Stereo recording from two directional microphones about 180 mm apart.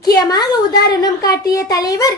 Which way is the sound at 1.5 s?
20° left (ahead or behind).